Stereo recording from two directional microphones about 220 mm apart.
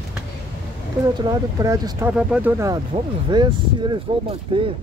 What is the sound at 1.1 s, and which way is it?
Speech, 15° right (ahead or behind).